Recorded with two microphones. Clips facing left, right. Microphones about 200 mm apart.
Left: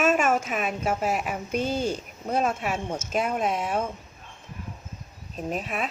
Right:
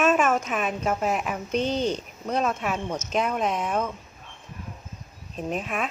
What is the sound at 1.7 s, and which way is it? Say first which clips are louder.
Speech: right 2 dB; 45° left (ahead or behind).